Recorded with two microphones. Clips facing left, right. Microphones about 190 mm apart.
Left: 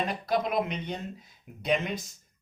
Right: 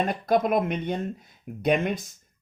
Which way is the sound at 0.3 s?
50° right (ahead or behind).